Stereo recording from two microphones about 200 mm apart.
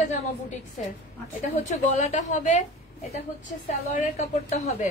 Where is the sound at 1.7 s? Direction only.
35° left (ahead or behind).